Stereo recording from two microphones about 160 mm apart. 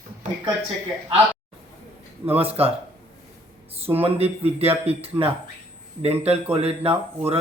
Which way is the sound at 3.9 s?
30° right (ahead or behind).